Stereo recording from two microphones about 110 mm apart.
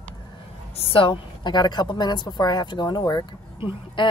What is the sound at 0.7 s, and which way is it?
A woman's voice, 55° left (ahead or behind).